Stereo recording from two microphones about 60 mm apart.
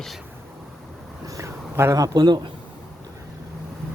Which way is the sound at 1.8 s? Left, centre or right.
Right.